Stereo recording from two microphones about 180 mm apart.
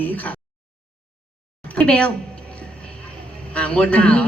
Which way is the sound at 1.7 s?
5° left (ahead or behind).